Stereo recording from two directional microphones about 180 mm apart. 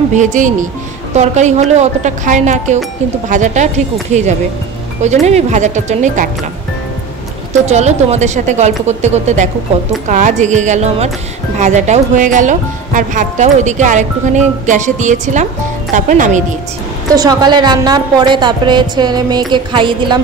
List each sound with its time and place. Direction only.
0.1 s a woman's voice: 45° right (ahead or behind)
7.6 s a woman's voice: 35° right (ahead or behind)
17.1 s a woman's voice: 20° right (ahead or behind)